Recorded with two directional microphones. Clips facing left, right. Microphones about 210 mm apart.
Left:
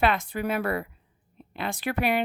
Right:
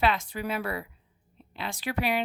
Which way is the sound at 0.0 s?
55° left (ahead or behind).